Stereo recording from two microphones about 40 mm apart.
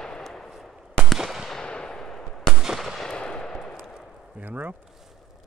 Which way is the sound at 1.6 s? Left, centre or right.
Left.